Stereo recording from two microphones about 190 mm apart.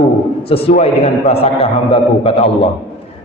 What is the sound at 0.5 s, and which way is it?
A man's voice, 35° left (ahead or behind).